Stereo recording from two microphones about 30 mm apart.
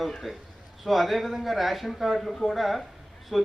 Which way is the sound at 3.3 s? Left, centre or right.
Centre.